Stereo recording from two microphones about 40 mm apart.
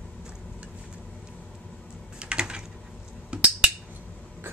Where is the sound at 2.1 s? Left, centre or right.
Right.